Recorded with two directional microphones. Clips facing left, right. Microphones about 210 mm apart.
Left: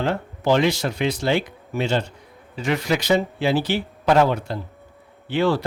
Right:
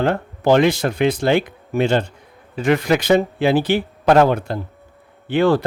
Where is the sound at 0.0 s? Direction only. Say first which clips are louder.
Right 4 dB; 55° right (ahead or behind).